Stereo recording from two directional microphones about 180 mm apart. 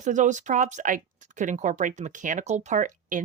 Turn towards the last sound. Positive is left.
turn(degrees=-45)  # may be behind; listen again after turning